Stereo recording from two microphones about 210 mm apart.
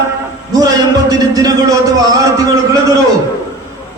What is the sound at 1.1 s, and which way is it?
A man's voice, 15° right (ahead or behind).